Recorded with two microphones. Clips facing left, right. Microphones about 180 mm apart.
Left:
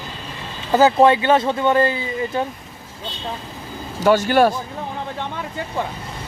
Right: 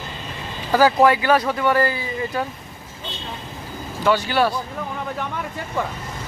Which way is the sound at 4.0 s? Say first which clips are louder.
Left 4 dB; 45° left (ahead or behind).